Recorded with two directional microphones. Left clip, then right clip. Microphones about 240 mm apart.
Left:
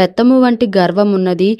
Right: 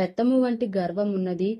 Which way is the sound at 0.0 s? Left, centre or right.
Left.